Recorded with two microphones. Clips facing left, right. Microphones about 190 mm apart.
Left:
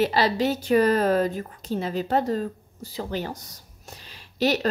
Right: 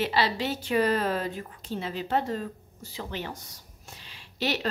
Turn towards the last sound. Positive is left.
turn(degrees=40)  # may be behind; listen again after turning